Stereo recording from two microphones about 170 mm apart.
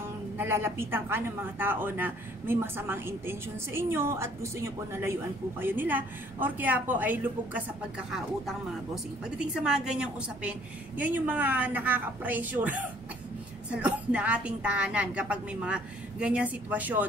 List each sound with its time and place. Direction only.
0.4 s a woman's voice: 15° right (ahead or behind)